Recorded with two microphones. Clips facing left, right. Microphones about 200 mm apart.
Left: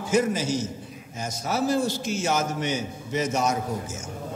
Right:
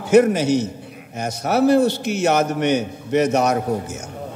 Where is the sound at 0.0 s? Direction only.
65° right (ahead or behind).